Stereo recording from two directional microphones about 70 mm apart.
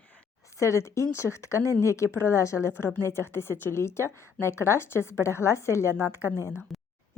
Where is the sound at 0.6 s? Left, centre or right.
Left.